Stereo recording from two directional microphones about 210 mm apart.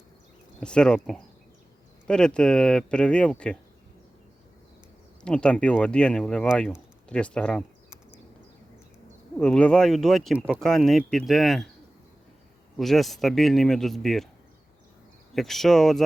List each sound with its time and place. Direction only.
0.6 s speech: 5° left (ahead or behind)
5.2 s speech: 5° left (ahead or behind)
9.4 s speech: 5° left (ahead or behind)
12.7 s speech: centre (ahead or behind)
15.3 s speech: centre (ahead or behind)